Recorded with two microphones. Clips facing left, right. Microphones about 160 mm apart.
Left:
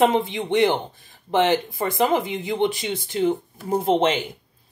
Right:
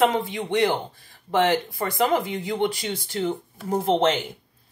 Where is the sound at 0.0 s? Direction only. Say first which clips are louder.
Left 2 dB; 25° left (ahead or behind).